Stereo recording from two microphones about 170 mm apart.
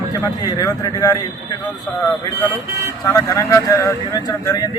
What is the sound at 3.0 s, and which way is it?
Speech, 20° left (ahead or behind).